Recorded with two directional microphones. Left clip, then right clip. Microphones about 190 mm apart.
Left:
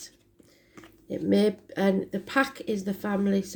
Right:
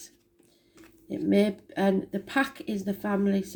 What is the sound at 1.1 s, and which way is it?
Speech, 35° left (ahead or behind).